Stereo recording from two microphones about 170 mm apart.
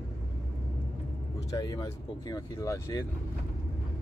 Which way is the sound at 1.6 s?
20° left (ahead or behind).